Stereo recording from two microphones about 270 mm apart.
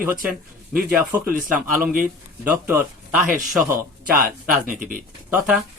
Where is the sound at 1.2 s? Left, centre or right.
Right.